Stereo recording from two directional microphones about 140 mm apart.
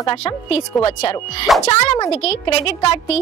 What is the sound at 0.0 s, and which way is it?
Speech, 40° left (ahead or behind).